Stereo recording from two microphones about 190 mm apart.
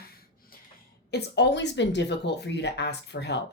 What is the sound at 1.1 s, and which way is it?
Speech, 60° left (ahead or behind).